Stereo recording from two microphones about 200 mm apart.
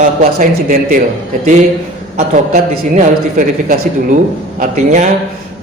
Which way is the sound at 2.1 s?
35° right (ahead or behind).